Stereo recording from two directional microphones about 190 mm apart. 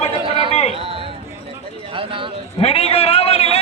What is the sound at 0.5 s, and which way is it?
Speech, 35° left (ahead or behind).